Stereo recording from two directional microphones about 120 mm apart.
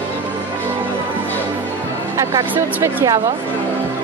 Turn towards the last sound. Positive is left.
turn(degrees=-25)  # may be behind; listen again after turning